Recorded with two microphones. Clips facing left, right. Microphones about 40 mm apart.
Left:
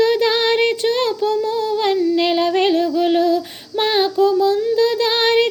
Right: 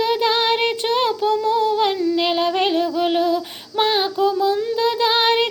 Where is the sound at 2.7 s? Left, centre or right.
Centre.